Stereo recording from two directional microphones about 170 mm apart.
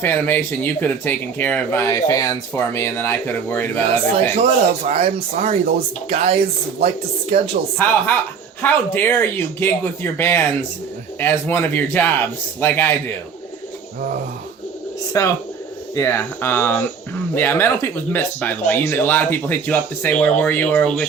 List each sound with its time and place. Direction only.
0.0 s speech: 10° left (ahead or behind)
4.4 s speech: 35° right (ahead or behind)
8.6 s speech: 10° left (ahead or behind)
15.1 s speech: 20° left (ahead or behind)